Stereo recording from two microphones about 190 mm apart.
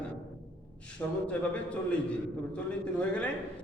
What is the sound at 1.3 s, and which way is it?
A man's voice, 5° left (ahead or behind).